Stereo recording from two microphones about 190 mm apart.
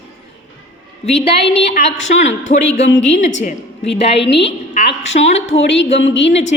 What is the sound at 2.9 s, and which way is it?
Speech, 70° left (ahead or behind).